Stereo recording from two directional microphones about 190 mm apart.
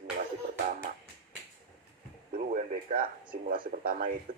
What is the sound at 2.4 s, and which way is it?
A man's voice, 45° right (ahead or behind).